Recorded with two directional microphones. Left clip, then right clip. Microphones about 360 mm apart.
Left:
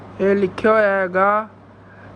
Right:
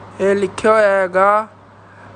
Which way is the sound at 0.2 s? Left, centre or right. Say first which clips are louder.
Right 2 dB; centre.